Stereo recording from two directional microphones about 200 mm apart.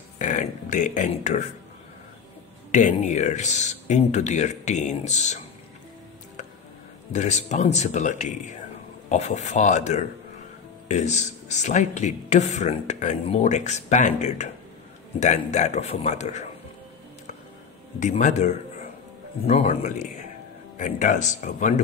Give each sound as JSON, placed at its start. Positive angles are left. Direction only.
{"t": 0.2, "sound": "speech", "side_deg": 40}
{"t": 2.7, "sound": "speech", "side_deg": 35}
{"t": 7.1, "sound": "speech", "side_deg": 35}
{"t": 17.9, "sound": "speech", "side_deg": 35}